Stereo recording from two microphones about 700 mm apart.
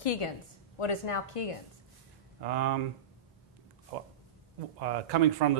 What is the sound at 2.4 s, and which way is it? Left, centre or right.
Speech, right.